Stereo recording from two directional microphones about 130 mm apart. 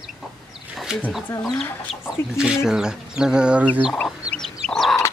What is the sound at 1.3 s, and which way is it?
Speech, 25° left (ahead or behind).